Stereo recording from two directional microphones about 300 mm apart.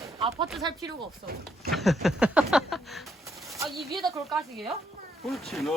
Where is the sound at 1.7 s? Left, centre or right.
Centre.